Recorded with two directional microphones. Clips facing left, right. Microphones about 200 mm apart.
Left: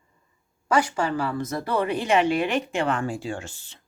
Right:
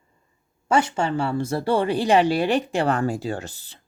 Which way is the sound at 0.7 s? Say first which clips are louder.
Right 2 dB; 25° right (ahead or behind).